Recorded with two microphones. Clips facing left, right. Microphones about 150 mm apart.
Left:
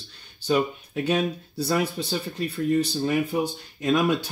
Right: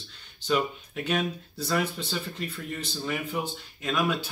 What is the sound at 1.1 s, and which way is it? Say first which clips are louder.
Speech: left 4 dB; 35° left (ahead or behind).